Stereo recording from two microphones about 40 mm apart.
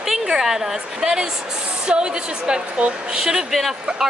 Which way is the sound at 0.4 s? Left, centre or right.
Centre.